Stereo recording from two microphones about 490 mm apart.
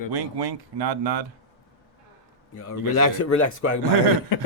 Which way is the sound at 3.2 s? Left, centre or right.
Left.